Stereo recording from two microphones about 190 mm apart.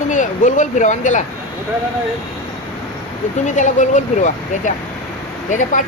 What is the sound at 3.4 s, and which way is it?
Speech, 40° left (ahead or behind).